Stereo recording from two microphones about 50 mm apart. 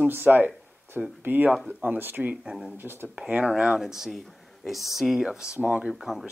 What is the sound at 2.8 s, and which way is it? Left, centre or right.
Speech, right.